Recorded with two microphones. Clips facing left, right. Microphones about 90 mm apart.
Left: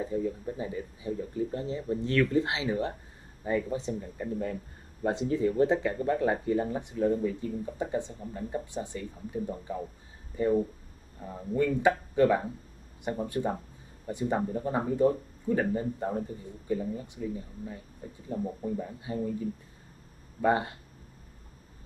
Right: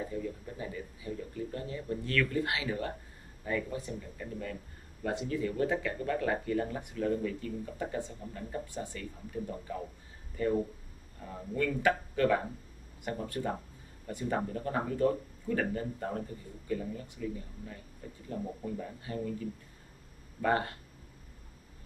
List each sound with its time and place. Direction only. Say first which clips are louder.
0.0 s speech: left 6 dB; 25° left (ahead or behind)
20.4 s speech: left 4 dB; 20° left (ahead or behind)